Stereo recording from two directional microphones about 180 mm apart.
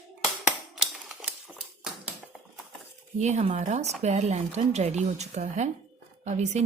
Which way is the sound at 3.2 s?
40° right (ahead or behind).